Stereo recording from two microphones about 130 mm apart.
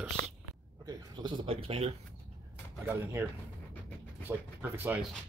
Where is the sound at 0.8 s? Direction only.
35° right (ahead or behind).